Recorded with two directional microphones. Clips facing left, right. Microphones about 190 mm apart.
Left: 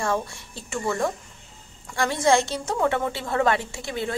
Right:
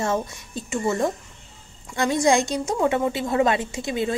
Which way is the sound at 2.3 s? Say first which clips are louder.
Left 2 dB; 15° right (ahead or behind).